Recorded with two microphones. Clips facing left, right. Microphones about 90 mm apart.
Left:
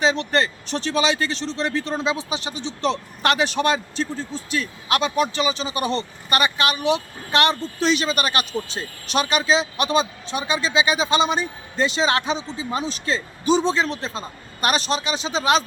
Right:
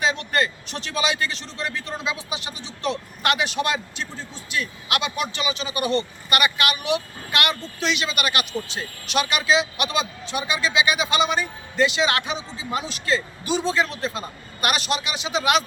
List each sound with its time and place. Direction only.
0.0 s a man's voice: 30° left (ahead or behind)